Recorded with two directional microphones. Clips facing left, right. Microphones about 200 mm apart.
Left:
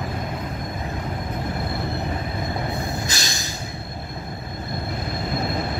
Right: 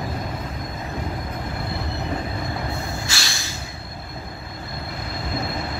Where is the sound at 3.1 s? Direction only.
20° left (ahead or behind).